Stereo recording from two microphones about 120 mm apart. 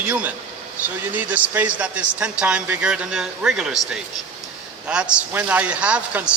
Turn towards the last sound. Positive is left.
turn(degrees=-10)  # may be behind; listen again after turning